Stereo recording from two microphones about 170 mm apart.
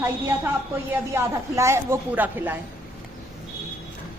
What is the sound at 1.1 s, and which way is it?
A woman's voice, 15° right (ahead or behind).